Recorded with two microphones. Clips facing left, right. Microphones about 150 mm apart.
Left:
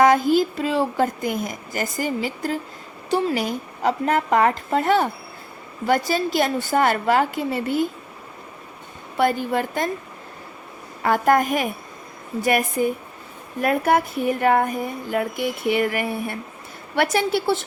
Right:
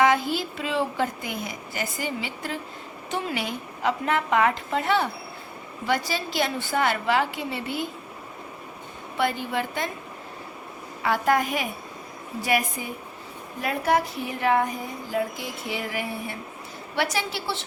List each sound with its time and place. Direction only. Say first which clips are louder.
0.0 s a woman's voice: left 6 dB; 45° left (ahead or behind)
9.1 s a woman's voice: left 5 dB; 45° left (ahead or behind)
11.0 s a woman's voice: left 5 dB; 50° left (ahead or behind)